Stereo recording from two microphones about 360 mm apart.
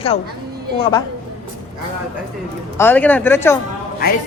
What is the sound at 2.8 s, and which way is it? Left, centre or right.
Speech, centre.